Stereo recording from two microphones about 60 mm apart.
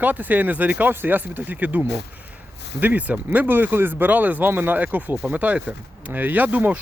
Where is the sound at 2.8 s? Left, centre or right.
Right.